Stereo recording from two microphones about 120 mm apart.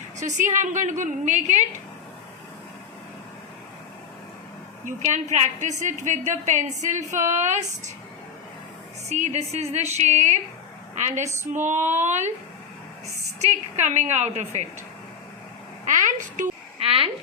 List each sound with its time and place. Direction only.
0.2 s a woman's voice: 85° right
4.9 s a woman's voice: 80° right
9.0 s a woman's voice: 70° right (ahead or behind)
13.4 s a woman's voice: 70° right (ahead or behind)
15.9 s a sound: 90° right
16.8 s a sound: 50° right (ahead or behind)